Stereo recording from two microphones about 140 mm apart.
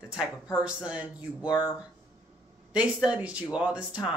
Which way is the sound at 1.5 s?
30° left (ahead or behind).